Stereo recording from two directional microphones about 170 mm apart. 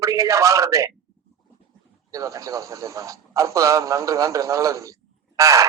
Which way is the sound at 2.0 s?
20° right (ahead or behind).